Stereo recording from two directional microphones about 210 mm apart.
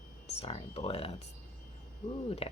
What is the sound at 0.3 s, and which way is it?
A woman's voice, 30° left (ahead or behind).